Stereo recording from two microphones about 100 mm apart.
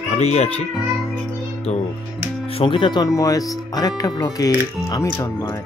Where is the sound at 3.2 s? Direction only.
35° left (ahead or behind).